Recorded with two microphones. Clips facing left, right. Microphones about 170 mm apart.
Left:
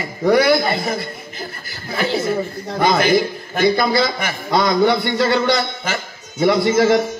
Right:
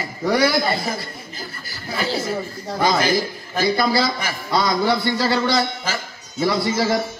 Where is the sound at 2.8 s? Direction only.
60° left (ahead or behind).